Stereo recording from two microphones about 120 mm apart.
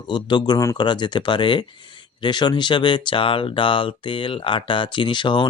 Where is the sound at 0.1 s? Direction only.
40° left (ahead or behind).